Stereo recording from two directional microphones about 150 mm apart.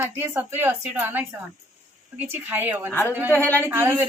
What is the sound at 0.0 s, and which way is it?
A woman's voice, 15° right (ahead or behind).